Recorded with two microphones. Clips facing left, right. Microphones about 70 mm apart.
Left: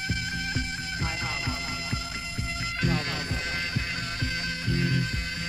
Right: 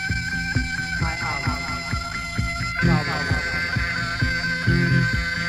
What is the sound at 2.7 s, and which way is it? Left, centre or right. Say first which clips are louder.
Music: right 8 dB; right.